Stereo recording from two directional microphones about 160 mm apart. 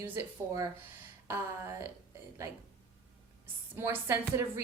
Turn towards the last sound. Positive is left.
turn(degrees=-15)  # may be behind; listen again after turning